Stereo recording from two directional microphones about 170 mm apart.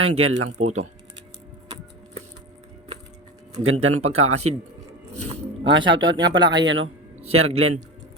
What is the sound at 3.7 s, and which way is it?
Speech, 40° right (ahead or behind).